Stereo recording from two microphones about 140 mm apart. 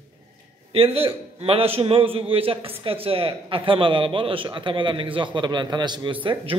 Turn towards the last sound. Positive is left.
turn(degrees=-35)  # may be behind; listen again after turning